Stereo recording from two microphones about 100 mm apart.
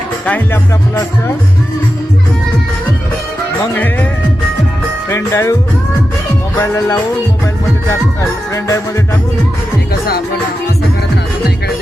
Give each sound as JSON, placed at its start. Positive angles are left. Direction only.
{"t": 0.3, "sound": "speech", "side_deg": 15}
{"t": 3.8, "sound": "speech", "side_deg": 15}
{"t": 5.0, "sound": "music", "side_deg": 30}
{"t": 6.6, "sound": "music", "side_deg": 30}
{"t": 8.5, "sound": "music", "side_deg": 30}